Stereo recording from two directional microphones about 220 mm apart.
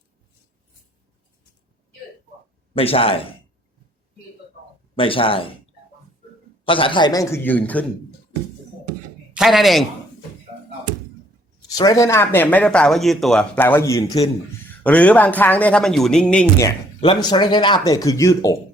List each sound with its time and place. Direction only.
2.7 s speech: 25° left (ahead or behind)
4.9 s speech: 25° left (ahead or behind)
6.7 s speech: 25° left (ahead or behind); by 7.9 s 5° left (ahead or behind)
9.3 s a man's voice: centre (ahead or behind)
11.7 s speech: 15° left (ahead or behind)
17.0 s speech: 20° left (ahead or behind)